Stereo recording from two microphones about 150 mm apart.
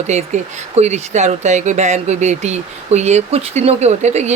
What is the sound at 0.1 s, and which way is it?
Speech, 50° right (ahead or behind).